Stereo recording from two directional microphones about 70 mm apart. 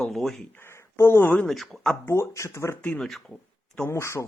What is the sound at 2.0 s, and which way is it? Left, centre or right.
Speech, left.